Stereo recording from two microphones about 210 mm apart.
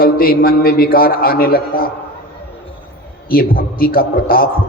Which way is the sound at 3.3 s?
45° left (ahead or behind).